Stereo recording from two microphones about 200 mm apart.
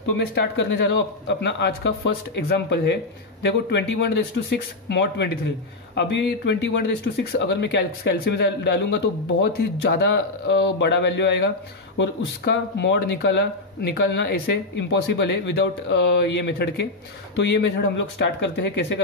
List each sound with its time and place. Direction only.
0.3 s speech: 60° left (ahead or behind)